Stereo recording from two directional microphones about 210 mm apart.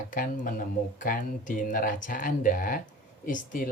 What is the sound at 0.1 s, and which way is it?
Speech, 40° left (ahead or behind).